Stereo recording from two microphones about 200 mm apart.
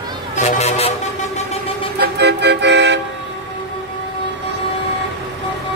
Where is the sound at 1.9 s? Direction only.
55° right (ahead or behind).